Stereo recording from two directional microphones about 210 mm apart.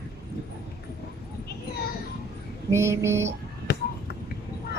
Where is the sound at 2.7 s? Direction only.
15° right (ahead or behind).